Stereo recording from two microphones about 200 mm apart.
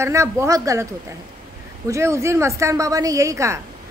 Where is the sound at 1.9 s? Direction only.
15° right (ahead or behind).